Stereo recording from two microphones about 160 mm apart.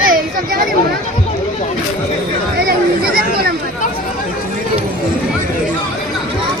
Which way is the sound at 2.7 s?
70° right (ahead or behind).